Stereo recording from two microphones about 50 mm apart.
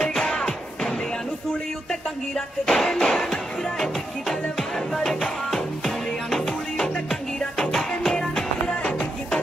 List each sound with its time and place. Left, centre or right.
0.1 s music: centre
4.9 s music: centre
8.6 s music: left